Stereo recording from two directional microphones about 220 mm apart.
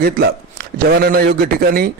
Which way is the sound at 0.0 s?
45° right (ahead or behind).